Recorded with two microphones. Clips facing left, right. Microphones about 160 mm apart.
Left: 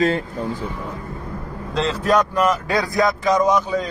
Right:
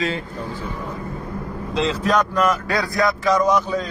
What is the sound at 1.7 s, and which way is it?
Speech, centre (ahead or behind).